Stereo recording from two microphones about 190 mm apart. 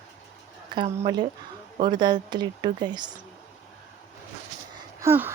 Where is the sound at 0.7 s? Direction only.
25° right (ahead or behind).